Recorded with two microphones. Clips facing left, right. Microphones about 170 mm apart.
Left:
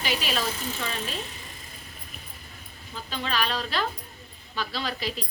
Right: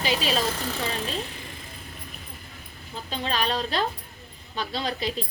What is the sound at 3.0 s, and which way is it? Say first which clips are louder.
A woman's voice: right 2 dB; 25° right (ahead or behind).